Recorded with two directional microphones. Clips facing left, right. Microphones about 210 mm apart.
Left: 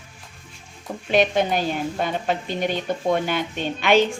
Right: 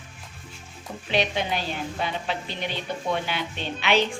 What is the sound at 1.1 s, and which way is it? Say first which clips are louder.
A woman's voice: left 6 dB; 50° left (ahead or behind).